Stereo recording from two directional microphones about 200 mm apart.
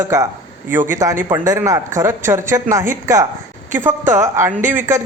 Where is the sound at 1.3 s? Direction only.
15° right (ahead or behind).